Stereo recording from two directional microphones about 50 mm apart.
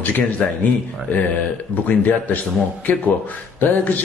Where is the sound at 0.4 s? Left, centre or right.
Centre.